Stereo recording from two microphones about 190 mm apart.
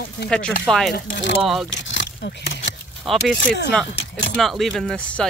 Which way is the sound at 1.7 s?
70° left (ahead or behind).